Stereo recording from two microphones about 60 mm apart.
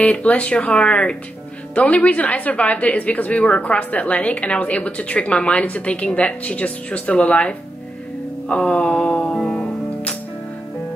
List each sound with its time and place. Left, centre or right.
0.0 s a woman's voice: left
8.5 s music: centre